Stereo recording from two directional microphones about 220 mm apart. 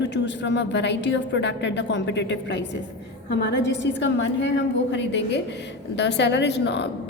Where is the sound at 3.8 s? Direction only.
55° left (ahead or behind).